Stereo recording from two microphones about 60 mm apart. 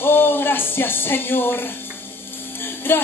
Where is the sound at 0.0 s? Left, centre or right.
Left.